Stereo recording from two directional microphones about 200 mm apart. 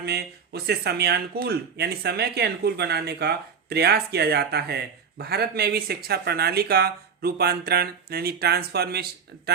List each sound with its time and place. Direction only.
0.0 s speech: 55° right (ahead or behind)